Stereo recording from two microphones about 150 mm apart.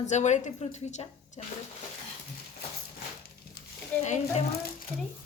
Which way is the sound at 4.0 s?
50° left (ahead or behind).